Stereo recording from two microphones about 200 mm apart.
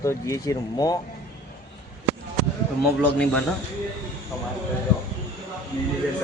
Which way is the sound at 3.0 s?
5° left (ahead or behind).